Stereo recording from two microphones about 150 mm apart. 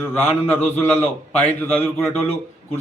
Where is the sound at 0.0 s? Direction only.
15° left (ahead or behind).